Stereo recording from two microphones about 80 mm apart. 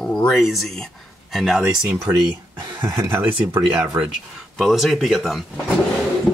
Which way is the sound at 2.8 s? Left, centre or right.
Right.